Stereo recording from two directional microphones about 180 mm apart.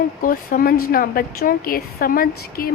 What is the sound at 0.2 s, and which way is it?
Speech, 55° left (ahead or behind).